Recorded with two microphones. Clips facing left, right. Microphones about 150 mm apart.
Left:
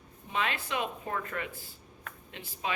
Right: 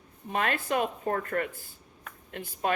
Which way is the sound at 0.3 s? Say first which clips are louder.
Right 4 dB; 50° right (ahead or behind).